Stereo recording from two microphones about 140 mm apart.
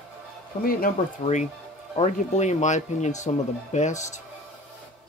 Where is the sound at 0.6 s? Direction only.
75° left (ahead or behind).